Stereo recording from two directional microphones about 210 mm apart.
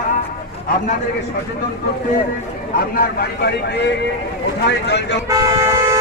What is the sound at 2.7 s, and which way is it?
Speech, 45° left (ahead or behind).